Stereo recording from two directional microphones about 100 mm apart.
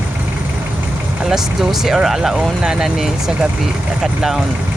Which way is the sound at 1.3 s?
5° right (ahead or behind).